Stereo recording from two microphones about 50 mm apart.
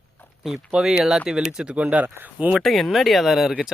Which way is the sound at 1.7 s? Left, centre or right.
Right.